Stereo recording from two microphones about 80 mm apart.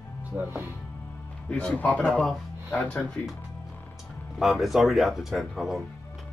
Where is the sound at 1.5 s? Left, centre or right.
Centre.